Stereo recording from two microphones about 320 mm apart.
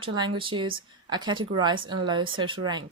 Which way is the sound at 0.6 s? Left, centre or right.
Centre.